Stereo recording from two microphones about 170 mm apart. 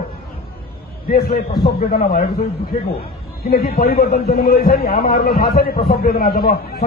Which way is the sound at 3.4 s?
60° left (ahead or behind).